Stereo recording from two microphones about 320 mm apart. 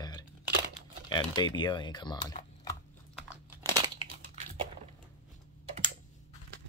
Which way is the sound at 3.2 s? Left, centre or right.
Centre.